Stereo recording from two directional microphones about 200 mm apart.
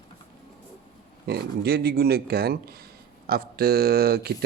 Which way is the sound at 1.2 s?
50° right (ahead or behind).